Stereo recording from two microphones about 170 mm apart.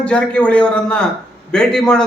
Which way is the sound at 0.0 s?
5° left (ahead or behind).